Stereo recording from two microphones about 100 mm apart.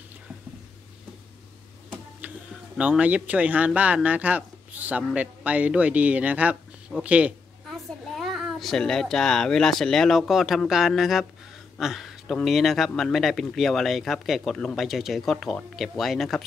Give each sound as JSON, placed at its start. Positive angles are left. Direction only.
{"t": 2.2, "sound": "a sound", "side_deg": -15}
{"t": 2.8, "sound": "speech", "side_deg": -15}
{"t": 7.7, "sound": "a child's voice", "side_deg": 0}